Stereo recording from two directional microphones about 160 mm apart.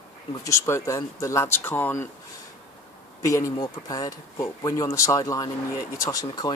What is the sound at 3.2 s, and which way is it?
Speech, 20° left (ahead or behind).